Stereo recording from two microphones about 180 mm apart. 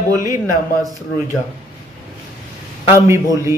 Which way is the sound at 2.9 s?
15° right (ahead or behind).